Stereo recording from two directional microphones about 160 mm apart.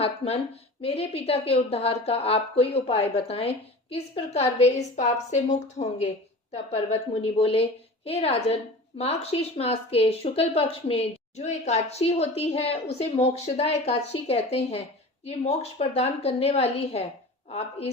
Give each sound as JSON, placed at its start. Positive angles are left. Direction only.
{"t": 0.2, "sound": "a woman's voice", "side_deg": 35}